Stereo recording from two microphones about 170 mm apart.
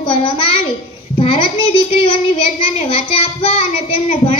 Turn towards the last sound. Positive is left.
turn(degrees=35)  # may be behind; listen again after turning